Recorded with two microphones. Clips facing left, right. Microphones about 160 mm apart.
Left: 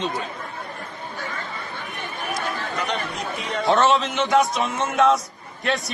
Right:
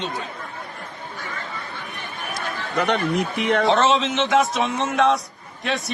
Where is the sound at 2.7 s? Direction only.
60° right (ahead or behind).